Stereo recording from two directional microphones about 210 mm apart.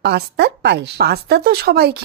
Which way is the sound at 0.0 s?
50° right (ahead or behind).